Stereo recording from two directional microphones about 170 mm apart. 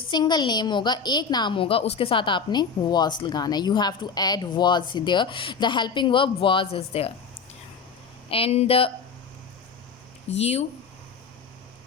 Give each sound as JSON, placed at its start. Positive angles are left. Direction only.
{"t": 0.1, "sound": "a woman's voice", "side_deg": 25}
{"t": 8.3, "sound": "speech", "side_deg": 35}
{"t": 10.2, "sound": "speech", "side_deg": 40}